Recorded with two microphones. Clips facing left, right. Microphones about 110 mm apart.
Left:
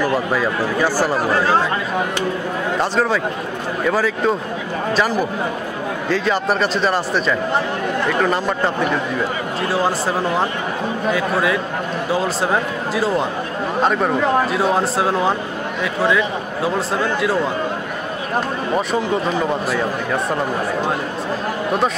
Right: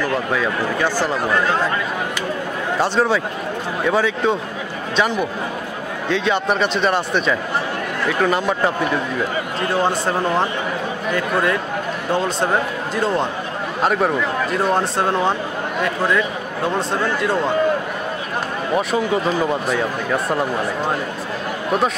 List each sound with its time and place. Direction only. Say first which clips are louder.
0.0 s speech: left 2 dB; 10° left (ahead or behind)
1.1 s speech: left 2 dB; 30° left (ahead or behind)
2.8 s a man's voice: right 2 dB; centre (ahead or behind)
6.0 s a man's voice: even; centre (ahead or behind)
18.8 s a man's voice: right 1 dB; centre (ahead or behind)